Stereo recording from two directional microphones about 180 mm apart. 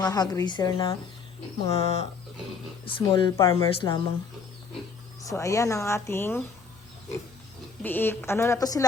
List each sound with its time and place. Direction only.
0.0 s speech: 20° left (ahead or behind)
1.7 s speech: 35° left (ahead or behind)
5.2 s a woman's voice: 15° left (ahead or behind)
7.8 s a woman's voice: 10° left (ahead or behind)